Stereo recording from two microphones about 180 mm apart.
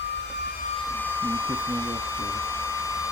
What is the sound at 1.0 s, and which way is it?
Hair dryer, 10° left (ahead or behind).